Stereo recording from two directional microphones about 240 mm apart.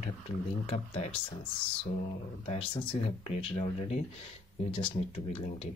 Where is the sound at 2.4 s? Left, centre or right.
Left.